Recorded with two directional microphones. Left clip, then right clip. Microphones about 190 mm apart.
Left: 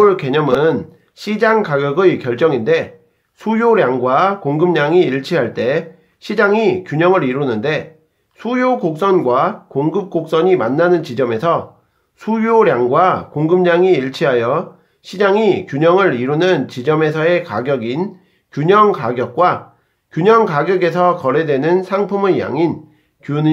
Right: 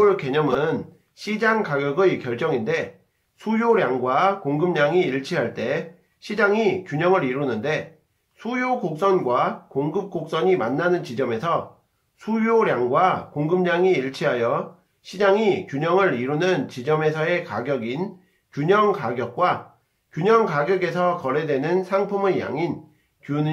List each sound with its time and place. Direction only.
0.0 s speech: 45° left (ahead or behind)